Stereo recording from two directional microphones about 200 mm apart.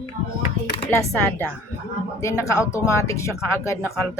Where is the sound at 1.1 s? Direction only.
10° left (ahead or behind).